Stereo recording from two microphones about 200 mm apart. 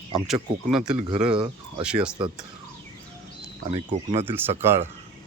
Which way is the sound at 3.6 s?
30° right (ahead or behind).